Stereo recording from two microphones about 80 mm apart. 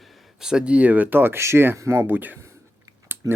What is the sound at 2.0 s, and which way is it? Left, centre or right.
Speech, right.